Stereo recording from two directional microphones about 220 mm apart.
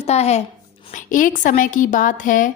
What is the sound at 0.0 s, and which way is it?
A woman's voice, 30° left (ahead or behind).